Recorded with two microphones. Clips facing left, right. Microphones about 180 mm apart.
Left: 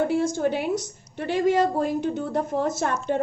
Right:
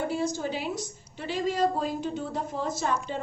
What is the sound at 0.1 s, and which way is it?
A woman's voice, 55° left (ahead or behind).